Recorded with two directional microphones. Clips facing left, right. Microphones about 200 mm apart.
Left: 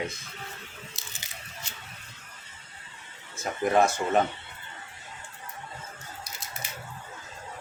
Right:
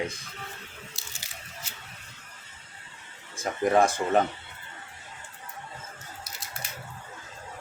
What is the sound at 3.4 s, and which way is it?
Speech, 30° right (ahead or behind).